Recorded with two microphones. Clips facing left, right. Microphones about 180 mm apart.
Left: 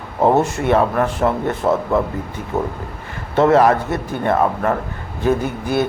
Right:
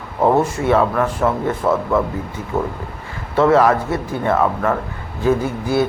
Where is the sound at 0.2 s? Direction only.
20° left (ahead or behind).